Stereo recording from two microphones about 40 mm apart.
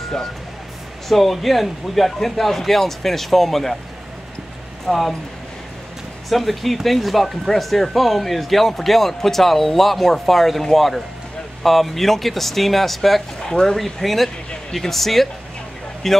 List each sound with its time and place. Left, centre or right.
1.0 s speech: centre
4.8 s speech: centre
6.2 s speech: centre
13.5 s speech: centre
13.7 s speech: centre